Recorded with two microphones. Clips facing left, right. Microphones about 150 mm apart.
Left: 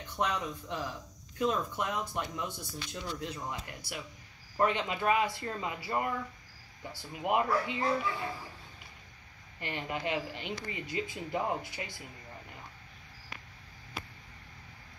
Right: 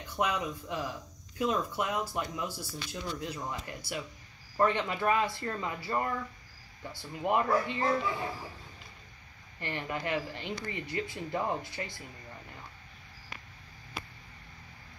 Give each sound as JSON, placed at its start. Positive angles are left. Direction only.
{"t": 0.0, "sound": "speech", "side_deg": -10}
{"t": 4.6, "sound": "speech", "side_deg": 15}
{"t": 9.6, "sound": "speech", "side_deg": 20}